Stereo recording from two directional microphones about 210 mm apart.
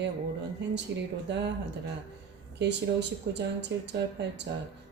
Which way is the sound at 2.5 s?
55° right (ahead or behind).